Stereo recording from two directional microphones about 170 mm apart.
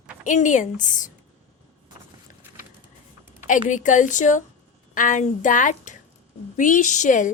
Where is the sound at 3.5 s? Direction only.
50° left (ahead or behind).